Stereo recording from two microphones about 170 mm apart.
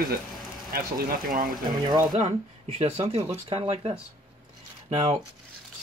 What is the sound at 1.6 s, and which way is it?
Speech, 25° right (ahead or behind).